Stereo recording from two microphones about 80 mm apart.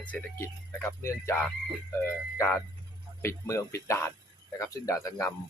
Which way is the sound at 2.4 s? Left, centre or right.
Left.